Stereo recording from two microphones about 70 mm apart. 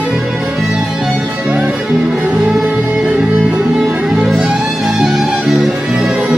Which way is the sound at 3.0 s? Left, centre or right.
Centre.